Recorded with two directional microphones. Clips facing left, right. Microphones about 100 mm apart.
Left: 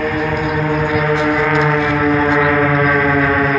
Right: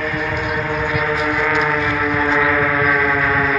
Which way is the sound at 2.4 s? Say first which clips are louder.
Left 3 dB; 35° left (ahead or behind).